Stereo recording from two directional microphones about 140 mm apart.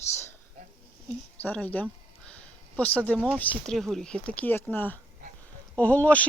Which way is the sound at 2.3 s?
10° left (ahead or behind).